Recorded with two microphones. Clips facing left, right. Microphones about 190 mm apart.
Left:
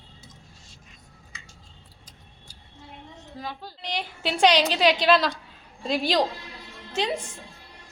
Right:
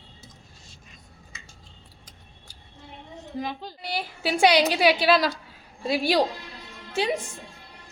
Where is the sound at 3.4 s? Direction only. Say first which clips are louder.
Right 2 dB; 15° right (ahead or behind).